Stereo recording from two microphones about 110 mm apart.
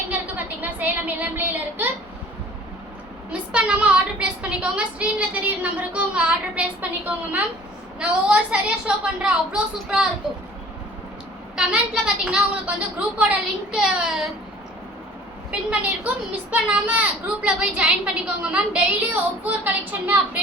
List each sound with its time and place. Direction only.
0.1 s a sound: 15° right (ahead or behind)
3.5 s a woman's voice: 10° right (ahead or behind)
11.5 s a woman's voice: 5° right (ahead or behind)
16.0 s a woman's voice: 15° right (ahead or behind)